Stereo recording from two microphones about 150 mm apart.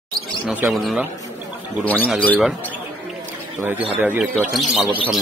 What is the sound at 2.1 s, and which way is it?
Speech, 10° left (ahead or behind).